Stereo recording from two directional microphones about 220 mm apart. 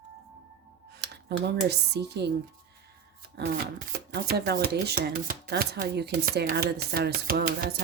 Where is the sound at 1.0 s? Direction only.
50° right (ahead or behind).